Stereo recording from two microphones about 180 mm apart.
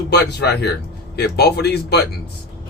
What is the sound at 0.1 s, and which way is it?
Speech, 65° left (ahead or behind).